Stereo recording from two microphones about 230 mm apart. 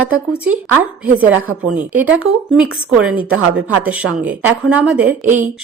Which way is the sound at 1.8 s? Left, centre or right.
Centre.